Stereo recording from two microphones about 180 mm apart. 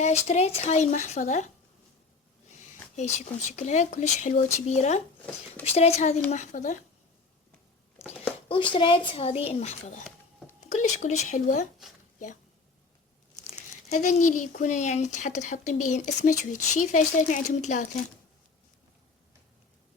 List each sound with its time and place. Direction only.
0.0 s speech: 35° left (ahead or behind)
3.5 s speech: 40° left (ahead or behind)
8.4 s speech: 30° left (ahead or behind)
13.5 s speech: 40° left (ahead or behind)